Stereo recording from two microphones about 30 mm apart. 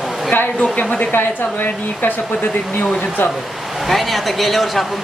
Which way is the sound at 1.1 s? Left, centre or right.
Left.